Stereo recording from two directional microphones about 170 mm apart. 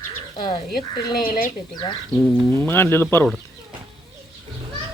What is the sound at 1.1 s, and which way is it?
Speech, 60° left (ahead or behind).